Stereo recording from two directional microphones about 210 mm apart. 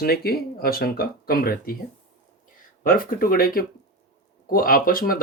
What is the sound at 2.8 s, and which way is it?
Speech, 45° left (ahead or behind).